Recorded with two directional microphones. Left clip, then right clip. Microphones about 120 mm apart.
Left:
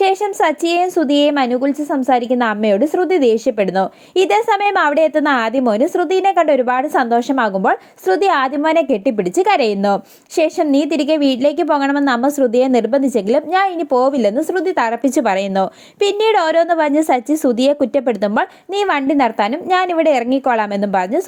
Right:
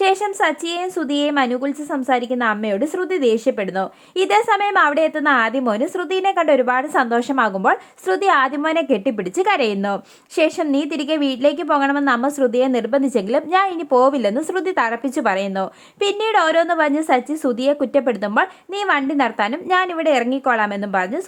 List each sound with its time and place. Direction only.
0.0 s a woman's voice: 20° left (ahead or behind)
15.0 s a woman's voice: 30° left (ahead or behind)